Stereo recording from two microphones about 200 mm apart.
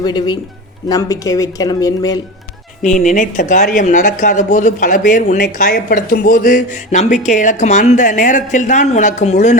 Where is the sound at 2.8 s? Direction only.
40° left (ahead or behind).